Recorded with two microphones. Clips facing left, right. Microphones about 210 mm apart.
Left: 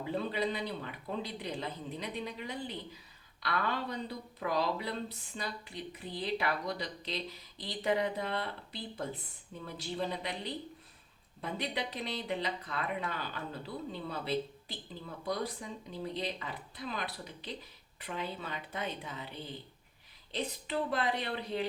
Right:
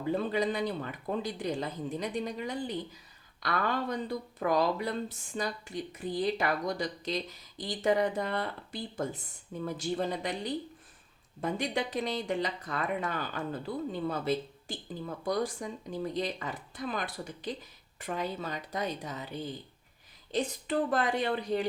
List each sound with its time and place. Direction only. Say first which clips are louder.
0.1 s a woman's voice: right 5 dB; 45° right (ahead or behind)
20.3 s speech: right 5 dB; 45° right (ahead or behind)